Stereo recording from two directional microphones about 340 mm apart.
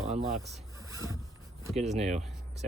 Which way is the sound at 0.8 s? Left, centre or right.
Centre.